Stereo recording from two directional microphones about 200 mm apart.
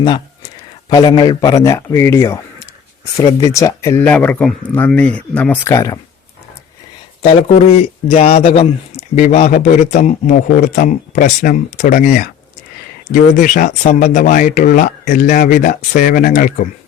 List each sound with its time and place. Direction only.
0.9 s speech: 25° left (ahead or behind)
7.2 s a man's voice: 30° left (ahead or behind)